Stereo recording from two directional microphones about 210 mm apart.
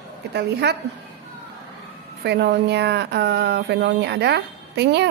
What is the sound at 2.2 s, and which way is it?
A woman's voice, 55° right (ahead or behind).